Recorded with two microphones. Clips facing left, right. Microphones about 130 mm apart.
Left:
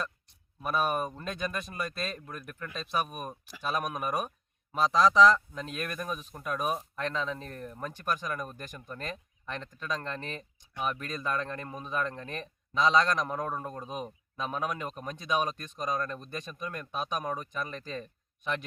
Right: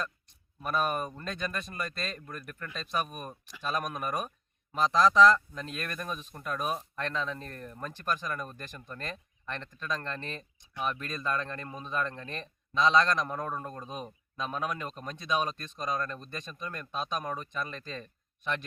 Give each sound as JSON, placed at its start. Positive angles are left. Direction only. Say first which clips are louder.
{"t": 0.6, "sound": "a man's voice", "louder": "left 1 dB", "side_deg": 5}